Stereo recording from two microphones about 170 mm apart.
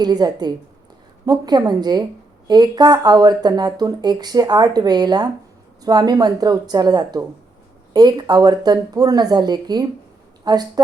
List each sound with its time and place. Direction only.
0.0 s speech: 25° right (ahead or behind)